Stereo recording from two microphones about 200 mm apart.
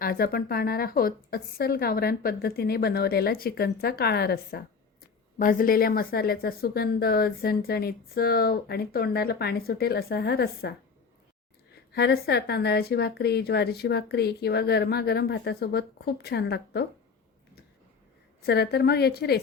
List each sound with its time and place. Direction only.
0.0 s a woman's voice: 50° left (ahead or behind)
11.9 s a woman's voice: 55° left (ahead or behind)
18.4 s a woman's voice: 55° left (ahead or behind)